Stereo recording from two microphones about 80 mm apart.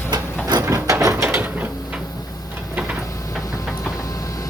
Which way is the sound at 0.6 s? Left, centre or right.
Right.